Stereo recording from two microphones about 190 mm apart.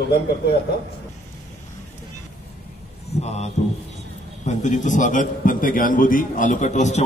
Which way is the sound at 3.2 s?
35° left (ahead or behind).